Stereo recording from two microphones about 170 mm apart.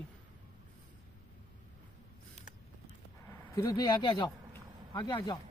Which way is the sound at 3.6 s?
20° left (ahead or behind).